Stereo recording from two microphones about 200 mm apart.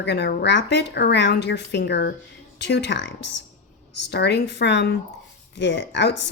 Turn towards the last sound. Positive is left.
turn(degrees=60)  # may be behind; listen again after turning